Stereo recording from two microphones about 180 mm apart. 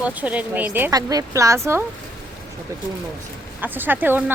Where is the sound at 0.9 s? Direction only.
20° right (ahead or behind).